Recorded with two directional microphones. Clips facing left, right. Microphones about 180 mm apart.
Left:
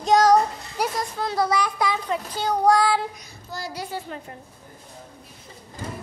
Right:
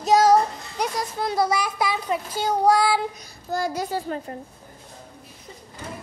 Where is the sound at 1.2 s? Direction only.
10° right (ahead or behind).